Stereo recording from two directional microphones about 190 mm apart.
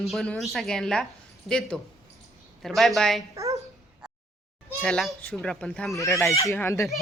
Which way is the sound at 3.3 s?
15° right (ahead or behind).